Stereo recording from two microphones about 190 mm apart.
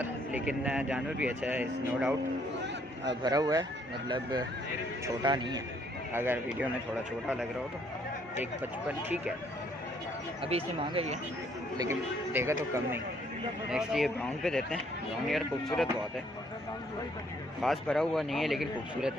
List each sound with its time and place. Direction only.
0.0 s speech: 10° right (ahead or behind)
3.3 s speech: 20° right (ahead or behind)
6.1 s speech: 10° right (ahead or behind)
10.4 s speech: 30° right (ahead or behind)
11.7 s speech: 15° right (ahead or behind)
13.7 s a man's voice: centre (ahead or behind)
17.6 s a man's voice: centre (ahead or behind)